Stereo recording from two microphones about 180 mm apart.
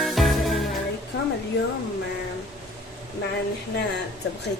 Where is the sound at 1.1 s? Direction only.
75° left (ahead or behind).